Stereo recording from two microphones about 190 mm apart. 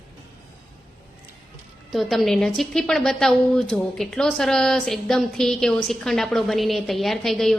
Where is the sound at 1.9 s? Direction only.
Centre (ahead or behind).